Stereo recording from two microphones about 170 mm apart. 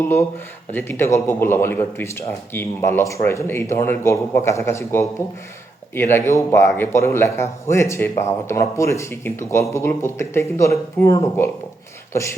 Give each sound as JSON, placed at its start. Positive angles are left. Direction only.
{"t": 0.0, "sound": "speech", "side_deg": 15}